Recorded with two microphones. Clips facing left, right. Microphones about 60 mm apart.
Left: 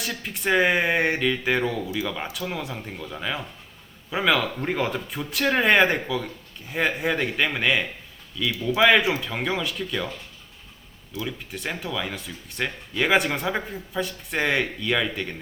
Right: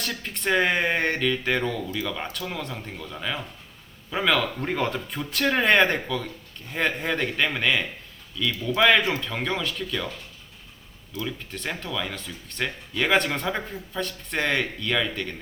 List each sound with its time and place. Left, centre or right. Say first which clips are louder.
0.0 s speech: left 1 dB; centre